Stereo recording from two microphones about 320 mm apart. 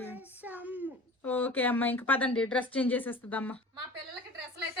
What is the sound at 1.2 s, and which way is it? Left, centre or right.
Speech, centre.